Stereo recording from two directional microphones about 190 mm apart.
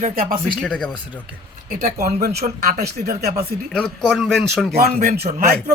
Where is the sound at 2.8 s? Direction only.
55° right (ahead or behind).